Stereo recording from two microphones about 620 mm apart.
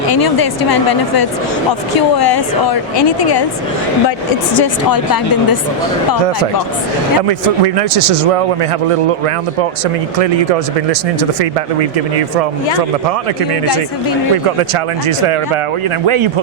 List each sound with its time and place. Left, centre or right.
0.1 s a woman's voice: left
4.5 s a woman's voice: left
7.2 s a man's voice: right
11.2 s speech: right
16.0 s a man's voice: right